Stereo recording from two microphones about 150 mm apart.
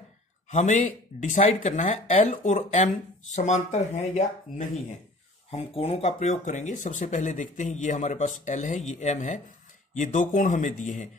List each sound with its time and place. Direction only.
0.5 s speech: 55° left (ahead or behind)
2.0 s speech: 40° left (ahead or behind)
2.3 s speech: 55° left (ahead or behind)